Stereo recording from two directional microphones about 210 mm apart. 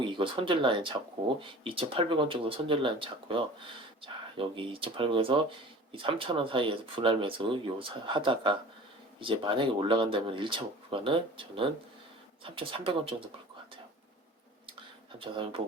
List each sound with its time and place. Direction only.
0.0 s speech: 25° right (ahead or behind)
15.2 s speech: 25° right (ahead or behind)